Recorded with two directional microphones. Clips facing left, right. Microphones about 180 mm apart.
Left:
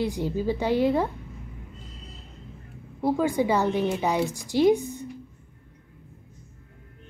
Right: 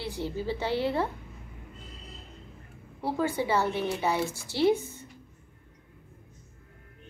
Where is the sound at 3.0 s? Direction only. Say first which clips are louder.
Left 5 dB; 15° left (ahead or behind).